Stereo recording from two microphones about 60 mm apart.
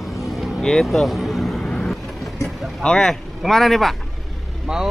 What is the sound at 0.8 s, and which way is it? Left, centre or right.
Vehicle, centre.